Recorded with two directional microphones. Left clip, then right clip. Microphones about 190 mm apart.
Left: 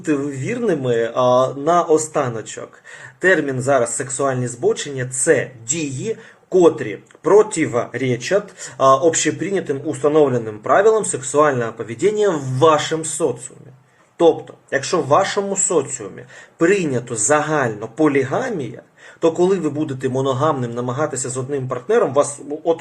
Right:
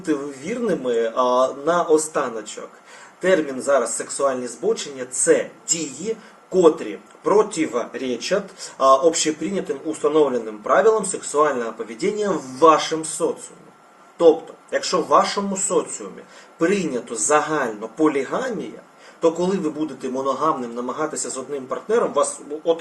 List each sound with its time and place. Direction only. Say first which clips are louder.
0.0 s a man's voice: left 3 dB; 15° left (ahead or behind)
6.5 s a man's voice: left 2 dB; 15° left (ahead or behind)
14.8 s a man's voice: left 1 dB; 15° left (ahead or behind)